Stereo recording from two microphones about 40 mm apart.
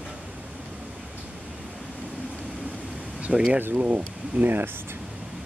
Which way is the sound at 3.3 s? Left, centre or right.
Centre.